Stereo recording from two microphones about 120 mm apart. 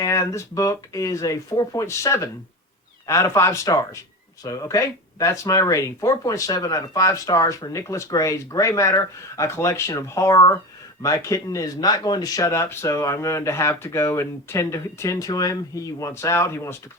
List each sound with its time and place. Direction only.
0.0 s speech: 25° left (ahead or behind)